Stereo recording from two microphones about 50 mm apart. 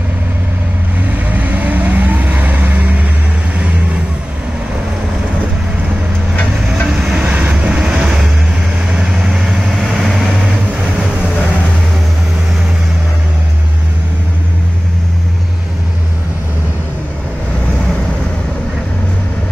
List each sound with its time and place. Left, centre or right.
1.3 s vehicle: right
7.0 s train: centre
7.2 s vehicle: right; by 10.2 s centre